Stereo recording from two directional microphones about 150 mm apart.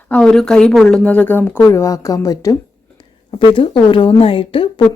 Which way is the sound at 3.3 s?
35° left (ahead or behind).